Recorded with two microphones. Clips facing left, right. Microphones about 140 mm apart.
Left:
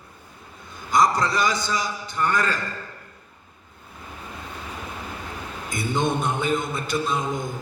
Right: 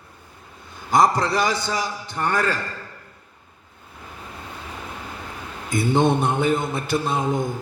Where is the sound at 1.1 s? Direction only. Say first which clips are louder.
Right 1 dB; 65° right (ahead or behind).